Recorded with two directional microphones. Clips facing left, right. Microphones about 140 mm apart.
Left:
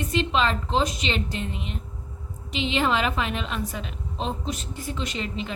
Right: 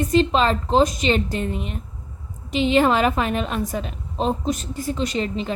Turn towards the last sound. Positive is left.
turn(degrees=-40)  # may be behind; listen again after turning